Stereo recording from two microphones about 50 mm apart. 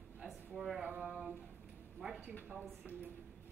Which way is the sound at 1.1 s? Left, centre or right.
Right.